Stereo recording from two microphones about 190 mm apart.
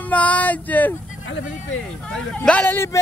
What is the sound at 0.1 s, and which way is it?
Speech, 10° left (ahead or behind).